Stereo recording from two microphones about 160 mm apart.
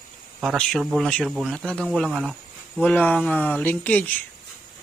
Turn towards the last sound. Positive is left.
turn(degrees=10)  # may be behind; listen again after turning